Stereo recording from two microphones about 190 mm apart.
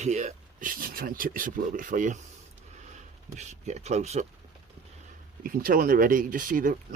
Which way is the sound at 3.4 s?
35° right (ahead or behind).